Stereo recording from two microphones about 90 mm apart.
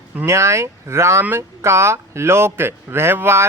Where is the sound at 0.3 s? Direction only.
30° right (ahead or behind).